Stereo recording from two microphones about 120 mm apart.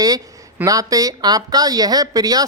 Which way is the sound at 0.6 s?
30° right (ahead or behind).